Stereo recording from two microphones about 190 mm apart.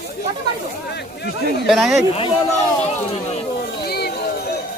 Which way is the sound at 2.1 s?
35° left (ahead or behind).